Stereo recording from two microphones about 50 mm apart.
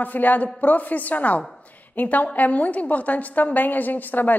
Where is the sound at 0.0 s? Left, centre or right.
Left.